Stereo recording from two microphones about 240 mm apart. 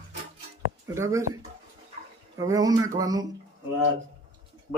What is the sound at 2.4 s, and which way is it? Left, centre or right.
Speech, centre.